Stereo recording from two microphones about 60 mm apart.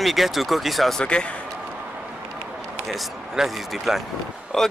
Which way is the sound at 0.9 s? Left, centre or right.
Centre.